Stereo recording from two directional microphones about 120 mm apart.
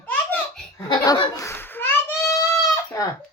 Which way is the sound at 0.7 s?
35° left (ahead or behind).